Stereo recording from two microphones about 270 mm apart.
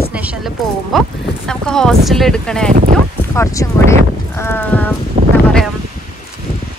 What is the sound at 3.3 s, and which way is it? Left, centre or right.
Clip-clop, centre.